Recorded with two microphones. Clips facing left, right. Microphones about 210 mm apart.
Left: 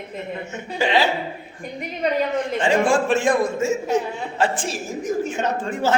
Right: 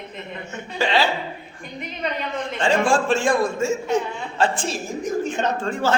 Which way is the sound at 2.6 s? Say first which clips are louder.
Even; 20° left (ahead or behind).